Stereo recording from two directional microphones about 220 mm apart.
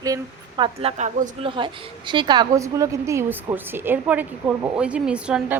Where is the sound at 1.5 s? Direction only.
25° right (ahead or behind).